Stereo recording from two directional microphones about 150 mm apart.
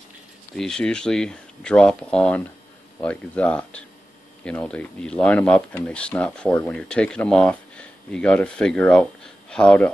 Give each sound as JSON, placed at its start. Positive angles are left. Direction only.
{"t": 0.6, "sound": "speech", "side_deg": 5}